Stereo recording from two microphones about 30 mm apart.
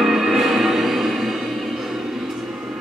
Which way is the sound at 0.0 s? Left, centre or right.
Centre.